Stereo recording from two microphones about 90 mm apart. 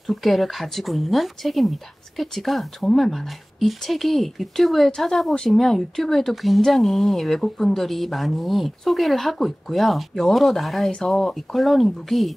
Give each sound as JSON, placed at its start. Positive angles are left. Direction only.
{"t": 0.0, "sound": "speech", "side_deg": 0}